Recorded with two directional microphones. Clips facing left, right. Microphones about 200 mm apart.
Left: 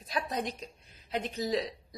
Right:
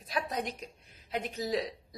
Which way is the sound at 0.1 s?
10° right (ahead or behind).